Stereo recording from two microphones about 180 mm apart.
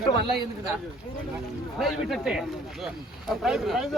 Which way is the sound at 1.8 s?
Centre (ahead or behind).